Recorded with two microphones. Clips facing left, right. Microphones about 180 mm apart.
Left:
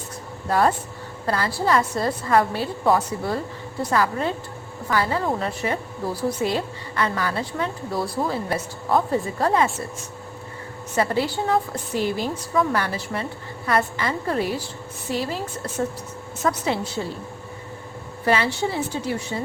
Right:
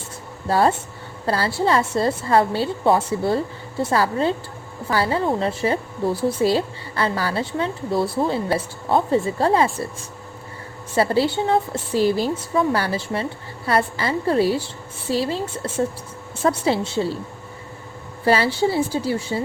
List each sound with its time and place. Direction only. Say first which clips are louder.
0.4 s a woman's voice: right 2 dB; 30° right (ahead or behind)
10.9 s a woman's voice: right 4 dB; 30° right (ahead or behind)
18.3 s a woman's voice: right 4 dB; 35° right (ahead or behind)